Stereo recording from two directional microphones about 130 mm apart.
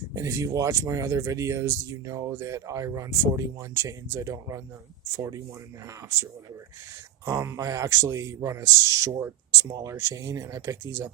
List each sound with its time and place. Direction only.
0.1 s speech: 25° right (ahead or behind)
7.3 s speech: 25° right (ahead or behind)